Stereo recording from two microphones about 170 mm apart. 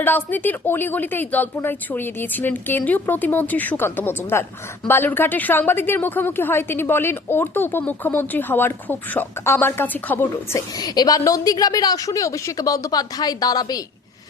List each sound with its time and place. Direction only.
0.0 s a woman's voice: 10° left (ahead or behind)
10.8 s a woman's voice: 20° left (ahead or behind)